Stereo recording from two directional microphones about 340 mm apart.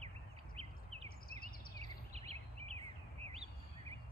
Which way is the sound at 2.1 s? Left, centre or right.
Centre.